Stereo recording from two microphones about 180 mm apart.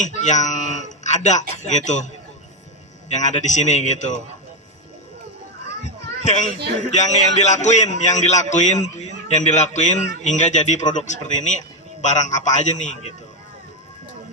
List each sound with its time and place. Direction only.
0.0 s a man's voice: 40° left (ahead or behind)
3.1 s a man's voice: 40° left (ahead or behind)
5.8 s children playing: 40° left (ahead or behind)
6.7 s a man's voice: 40° left (ahead or behind)